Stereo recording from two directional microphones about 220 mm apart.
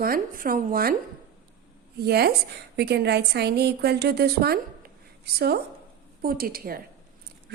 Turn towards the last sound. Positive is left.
turn(degrees=-40)  # may be behind; listen again after turning